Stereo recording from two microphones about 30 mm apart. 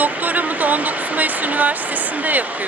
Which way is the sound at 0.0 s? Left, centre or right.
Right.